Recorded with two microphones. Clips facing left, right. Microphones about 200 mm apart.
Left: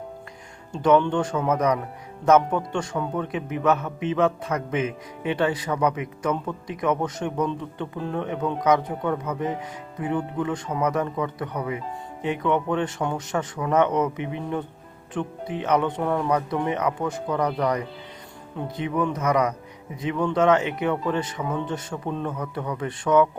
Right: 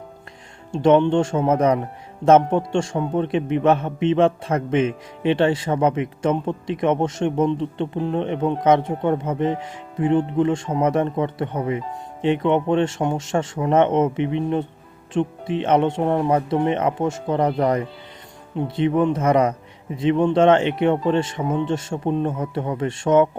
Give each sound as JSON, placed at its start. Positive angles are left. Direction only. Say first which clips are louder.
{"t": 0.7, "sound": "a man's voice", "louder": "right 4 dB", "side_deg": -25}